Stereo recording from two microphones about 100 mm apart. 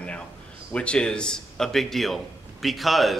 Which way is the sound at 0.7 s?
10° left (ahead or behind).